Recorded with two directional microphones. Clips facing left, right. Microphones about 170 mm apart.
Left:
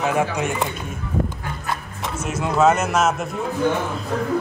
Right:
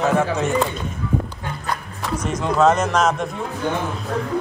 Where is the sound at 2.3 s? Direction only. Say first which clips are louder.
Even; 5° left (ahead or behind).